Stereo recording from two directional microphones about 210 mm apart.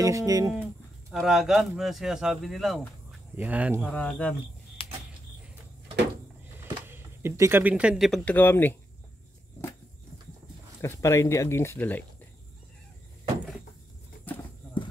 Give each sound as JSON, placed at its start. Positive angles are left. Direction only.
{"t": 0.0, "sound": "speech", "side_deg": -15}
{"t": 1.1, "sound": "speech", "side_deg": 0}
{"t": 3.8, "sound": "speech", "side_deg": 5}
{"t": 4.8, "sound": "a sound", "side_deg": 25}
{"t": 6.6, "sound": "speech", "side_deg": -10}
{"t": 10.8, "sound": "speech", "side_deg": 15}